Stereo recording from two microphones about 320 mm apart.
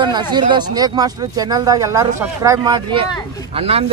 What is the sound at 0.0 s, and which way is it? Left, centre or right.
Speech, centre.